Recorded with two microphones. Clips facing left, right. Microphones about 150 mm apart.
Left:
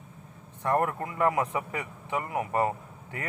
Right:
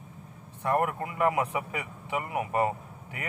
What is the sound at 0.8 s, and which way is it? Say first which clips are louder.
Speech: even; 20° right (ahead or behind).